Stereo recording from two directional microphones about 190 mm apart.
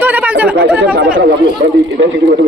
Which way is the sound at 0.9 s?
50° right (ahead or behind).